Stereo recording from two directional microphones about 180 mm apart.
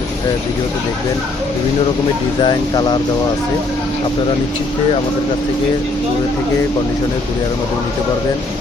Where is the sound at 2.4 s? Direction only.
25° left (ahead or behind).